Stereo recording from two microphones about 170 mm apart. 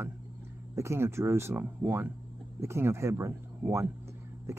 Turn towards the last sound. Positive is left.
turn(degrees=-15)  # may be behind; listen again after turning